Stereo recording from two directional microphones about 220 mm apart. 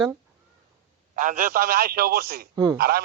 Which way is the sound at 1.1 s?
35° right (ahead or behind).